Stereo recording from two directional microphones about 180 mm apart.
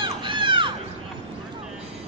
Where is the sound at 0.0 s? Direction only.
25° right (ahead or behind).